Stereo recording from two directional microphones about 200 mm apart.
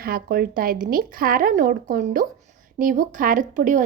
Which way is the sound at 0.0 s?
50° right (ahead or behind).